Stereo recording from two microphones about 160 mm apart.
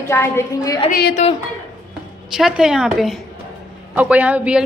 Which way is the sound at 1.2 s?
40° left (ahead or behind).